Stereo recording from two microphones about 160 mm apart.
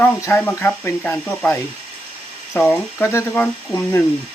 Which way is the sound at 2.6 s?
10° left (ahead or behind).